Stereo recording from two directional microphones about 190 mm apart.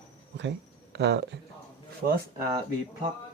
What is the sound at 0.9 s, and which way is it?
Speech, 65° right (ahead or behind).